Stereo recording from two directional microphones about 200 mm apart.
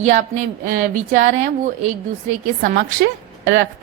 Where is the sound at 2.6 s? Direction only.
50° right (ahead or behind); by 3.7 s 65° right (ahead or behind).